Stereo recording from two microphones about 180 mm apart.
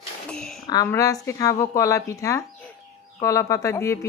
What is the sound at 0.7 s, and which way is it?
A woman's voice, 20° left (ahead or behind).